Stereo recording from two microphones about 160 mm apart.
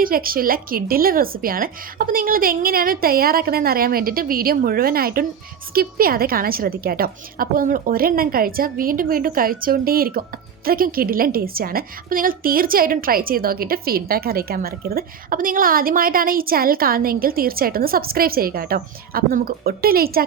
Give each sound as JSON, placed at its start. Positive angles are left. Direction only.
{"t": 0.0, "sound": "a woman's voice", "side_deg": -65}